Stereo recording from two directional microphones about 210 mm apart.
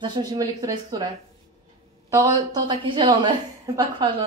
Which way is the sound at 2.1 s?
20° right (ahead or behind).